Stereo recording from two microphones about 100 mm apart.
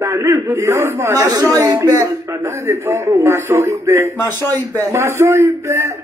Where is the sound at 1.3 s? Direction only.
40° right (ahead or behind).